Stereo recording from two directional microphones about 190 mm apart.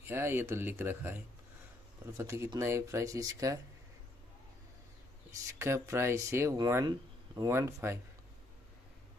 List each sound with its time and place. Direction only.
0.1 s speech: 10° right (ahead or behind)
5.6 s speech: 15° right (ahead or behind)